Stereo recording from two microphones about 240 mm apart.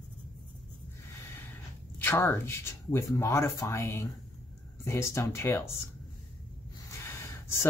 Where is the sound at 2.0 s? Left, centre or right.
Centre.